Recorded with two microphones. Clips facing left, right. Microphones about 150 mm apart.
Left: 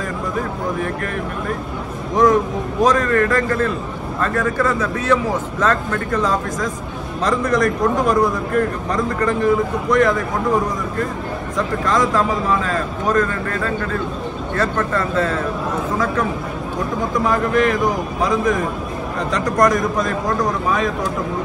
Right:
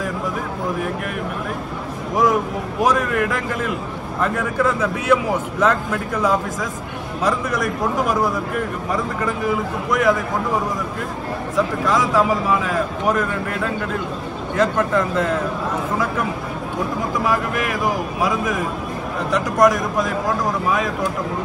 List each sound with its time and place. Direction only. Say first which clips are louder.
2.1 s a man's voice: left 3 dB; 5° right (ahead or behind)
17.1 s a man's voice: left 5 dB; centre (ahead or behind)